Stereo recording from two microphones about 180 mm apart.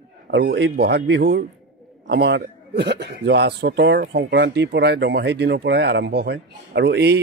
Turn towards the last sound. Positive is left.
turn(degrees=-70)  # may be behind; listen again after turning